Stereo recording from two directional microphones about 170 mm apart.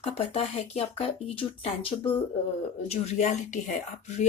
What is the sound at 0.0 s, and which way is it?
Speech, 35° left (ahead or behind).